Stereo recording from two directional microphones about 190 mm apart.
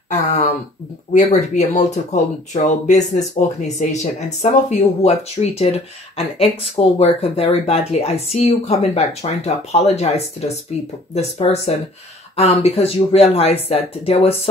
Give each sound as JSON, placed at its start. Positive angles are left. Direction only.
{"t": 1.1, "sound": "speech", "side_deg": 40}